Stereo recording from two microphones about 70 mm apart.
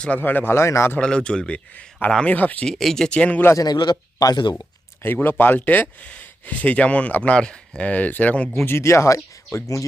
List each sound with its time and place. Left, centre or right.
0.2 s speech: left
0.5 s a man's voice: left
0.9 s speech: centre
2.6 s speech: centre
3.6 s a man's voice: left
5.0 s speech: left
8.6 s speech: left